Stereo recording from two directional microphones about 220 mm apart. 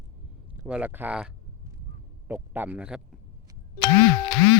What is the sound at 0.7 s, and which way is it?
A man's voice, 10° right (ahead or behind).